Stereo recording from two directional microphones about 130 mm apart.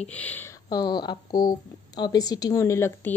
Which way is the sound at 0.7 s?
30° left (ahead or behind).